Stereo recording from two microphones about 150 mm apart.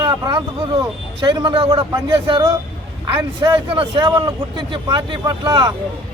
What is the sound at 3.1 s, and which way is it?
A man's voice, 35° right (ahead or behind).